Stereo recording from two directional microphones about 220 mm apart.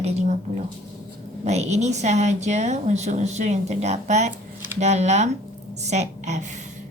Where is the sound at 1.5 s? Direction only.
30° right (ahead or behind).